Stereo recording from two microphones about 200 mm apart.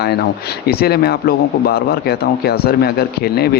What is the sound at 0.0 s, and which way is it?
A man's voice, 55° left (ahead or behind).